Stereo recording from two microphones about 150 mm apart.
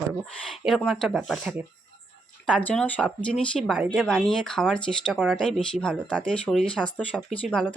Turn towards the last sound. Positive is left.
turn(degrees=5)  # may be behind; listen again after turning